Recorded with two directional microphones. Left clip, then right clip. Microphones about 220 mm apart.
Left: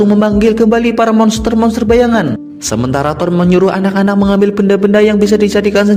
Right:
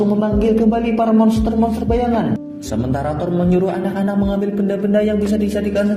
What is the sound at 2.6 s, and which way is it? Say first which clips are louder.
A man's voice: left 8 dB; 45° left (ahead or behind).